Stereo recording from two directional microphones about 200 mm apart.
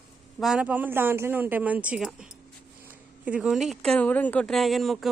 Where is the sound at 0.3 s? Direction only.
5° right (ahead or behind).